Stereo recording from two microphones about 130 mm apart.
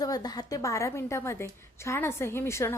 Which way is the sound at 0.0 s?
30° left (ahead or behind).